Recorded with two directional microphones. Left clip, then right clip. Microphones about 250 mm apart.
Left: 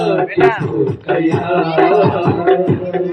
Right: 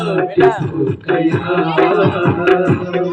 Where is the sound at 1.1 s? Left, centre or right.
Right.